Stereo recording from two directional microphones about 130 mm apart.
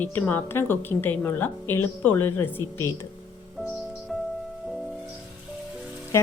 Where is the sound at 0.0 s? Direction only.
15° left (ahead or behind).